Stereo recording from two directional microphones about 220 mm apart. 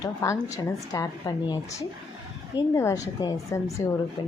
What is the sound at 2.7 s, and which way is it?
Speech, 15° left (ahead or behind).